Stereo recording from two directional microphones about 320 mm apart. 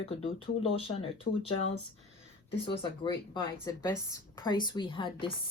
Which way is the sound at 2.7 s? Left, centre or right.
Centre.